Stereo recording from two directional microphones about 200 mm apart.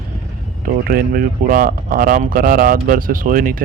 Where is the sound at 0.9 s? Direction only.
50° right (ahead or behind).